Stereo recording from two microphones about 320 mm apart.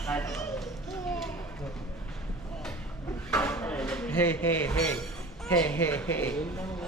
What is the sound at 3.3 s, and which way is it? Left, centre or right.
Speech, centre.